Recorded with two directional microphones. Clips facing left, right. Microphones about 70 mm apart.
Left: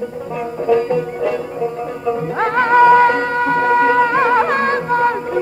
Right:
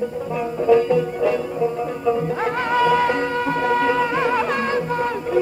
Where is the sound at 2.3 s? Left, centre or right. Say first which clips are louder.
Left 7 dB; left.